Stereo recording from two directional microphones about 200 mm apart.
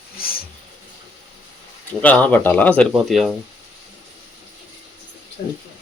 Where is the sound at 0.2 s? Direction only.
50° left (ahead or behind).